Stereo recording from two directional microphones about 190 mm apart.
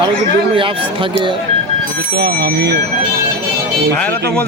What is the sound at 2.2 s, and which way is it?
Speech, 60° right (ahead or behind).